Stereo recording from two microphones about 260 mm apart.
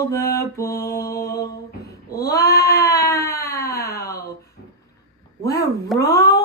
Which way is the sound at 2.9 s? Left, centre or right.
Left.